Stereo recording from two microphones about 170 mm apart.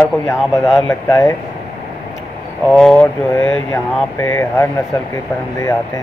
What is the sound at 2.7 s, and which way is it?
Speech, 5° left (ahead or behind).